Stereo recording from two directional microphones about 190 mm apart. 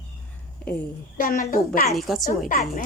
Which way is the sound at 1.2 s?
45° left (ahead or behind).